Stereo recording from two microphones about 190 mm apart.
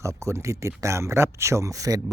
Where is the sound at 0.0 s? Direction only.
15° right (ahead or behind).